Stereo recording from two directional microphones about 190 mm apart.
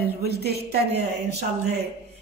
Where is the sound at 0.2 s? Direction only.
55° right (ahead or behind).